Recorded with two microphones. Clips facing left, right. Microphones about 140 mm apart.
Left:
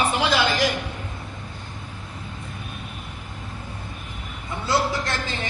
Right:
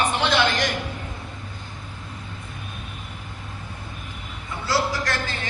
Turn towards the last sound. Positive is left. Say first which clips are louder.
# even
turn(degrees=20)  # may be behind; listen again after turning